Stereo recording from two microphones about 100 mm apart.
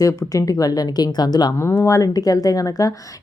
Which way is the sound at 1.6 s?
25° left (ahead or behind).